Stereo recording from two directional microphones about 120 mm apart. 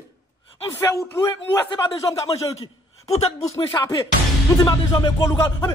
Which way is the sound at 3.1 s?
60° left (ahead or behind).